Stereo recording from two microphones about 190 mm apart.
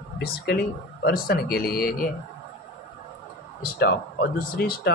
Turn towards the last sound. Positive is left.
turn(degrees=50)  # may be behind; listen again after turning